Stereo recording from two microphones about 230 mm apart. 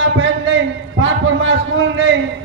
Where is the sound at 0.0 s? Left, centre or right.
Right.